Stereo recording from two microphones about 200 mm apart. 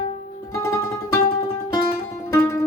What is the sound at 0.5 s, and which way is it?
Music, 15° left (ahead or behind).